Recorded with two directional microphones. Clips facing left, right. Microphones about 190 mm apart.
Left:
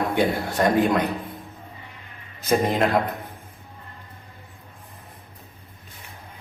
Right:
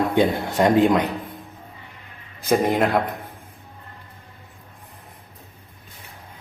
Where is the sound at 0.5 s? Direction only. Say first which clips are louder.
Right 4 dB; 15° right (ahead or behind).